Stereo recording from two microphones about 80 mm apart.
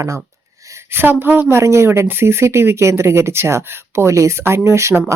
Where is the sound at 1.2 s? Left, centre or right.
Right.